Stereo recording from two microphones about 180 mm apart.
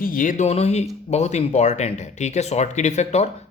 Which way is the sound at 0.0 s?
50° left (ahead or behind).